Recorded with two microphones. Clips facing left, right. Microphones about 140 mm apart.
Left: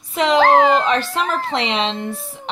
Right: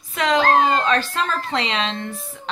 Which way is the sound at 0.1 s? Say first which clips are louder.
Left 3 dB; 25° left (ahead or behind).